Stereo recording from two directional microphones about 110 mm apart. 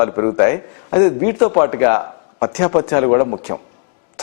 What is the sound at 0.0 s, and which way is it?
A man's voice, 15° left (ahead or behind).